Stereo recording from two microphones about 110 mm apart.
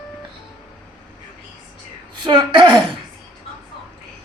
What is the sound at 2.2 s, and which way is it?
Speech, 45° right (ahead or behind).